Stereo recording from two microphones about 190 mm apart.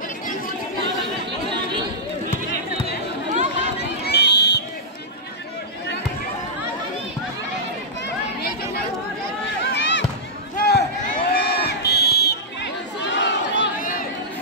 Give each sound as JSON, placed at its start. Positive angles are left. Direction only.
{"t": 4.0, "sound": "run", "side_deg": 60}
{"t": 8.4, "sound": "chatter", "side_deg": 55}
{"t": 9.6, "sound": "run", "side_deg": 65}
{"t": 10.6, "sound": "crowd", "side_deg": 55}
{"t": 13.7, "sound": "chatter", "side_deg": 45}